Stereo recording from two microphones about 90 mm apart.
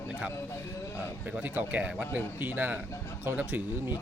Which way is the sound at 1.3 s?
20° right (ahead or behind).